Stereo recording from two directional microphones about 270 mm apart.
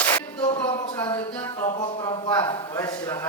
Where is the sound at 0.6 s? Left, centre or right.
Centre.